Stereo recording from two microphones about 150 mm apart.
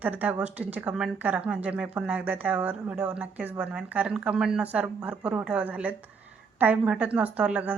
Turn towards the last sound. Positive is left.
turn(degrees=-10)  # may be behind; listen again after turning